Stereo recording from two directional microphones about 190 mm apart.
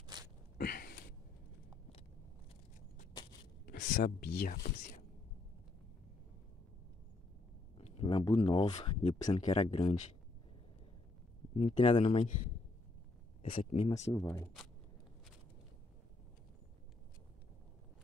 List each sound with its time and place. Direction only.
0.1 s a sound: 20° right (ahead or behind)
0.6 s a sound: 50° left (ahead or behind)
3.9 s speech: 50° left (ahead or behind)
4.7 s speech: 35° left (ahead or behind)
7.7 s speech: 30° left (ahead or behind)
11.5 s speech: 35° left (ahead or behind)
13.4 s speech: 30° left (ahead or behind)
14.1 s speech: 15° left (ahead or behind)